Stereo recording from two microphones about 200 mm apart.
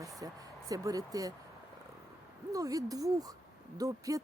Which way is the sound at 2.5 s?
15° right (ahead or behind).